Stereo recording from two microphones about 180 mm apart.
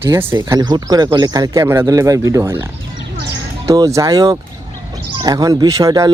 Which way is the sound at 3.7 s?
15° right (ahead or behind).